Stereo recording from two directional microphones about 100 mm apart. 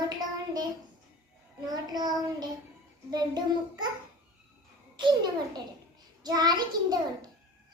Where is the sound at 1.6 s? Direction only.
40° right (ahead or behind).